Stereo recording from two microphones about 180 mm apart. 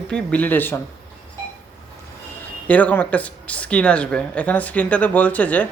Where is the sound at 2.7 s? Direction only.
10° left (ahead or behind).